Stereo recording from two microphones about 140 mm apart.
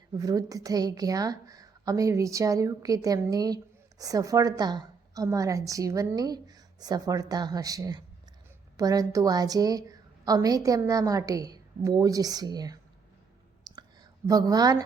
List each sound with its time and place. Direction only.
0.2 s a woman's voice: 25° right (ahead or behind)
13.7 s whispering: 30° right (ahead or behind)
14.3 s a woman's voice: 25° right (ahead or behind)